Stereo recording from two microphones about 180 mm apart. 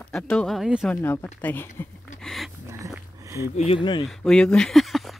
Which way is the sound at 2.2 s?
Centre (ahead or behind).